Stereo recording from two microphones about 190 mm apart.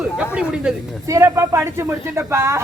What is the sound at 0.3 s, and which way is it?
Speech, 5° right (ahead or behind).